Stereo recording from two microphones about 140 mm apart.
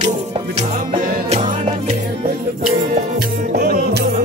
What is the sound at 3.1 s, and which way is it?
Music, 90° right.